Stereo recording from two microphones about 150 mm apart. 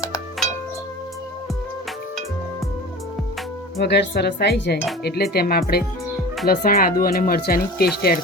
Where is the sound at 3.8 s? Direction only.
90° left.